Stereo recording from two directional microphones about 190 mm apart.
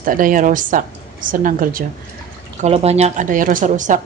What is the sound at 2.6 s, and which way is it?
A woman's voice, 35° right (ahead or behind).